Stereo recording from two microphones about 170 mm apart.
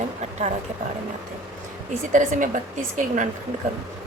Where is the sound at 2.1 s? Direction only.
45° right (ahead or behind).